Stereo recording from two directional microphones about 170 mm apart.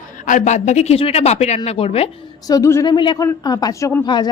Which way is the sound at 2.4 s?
20° left (ahead or behind).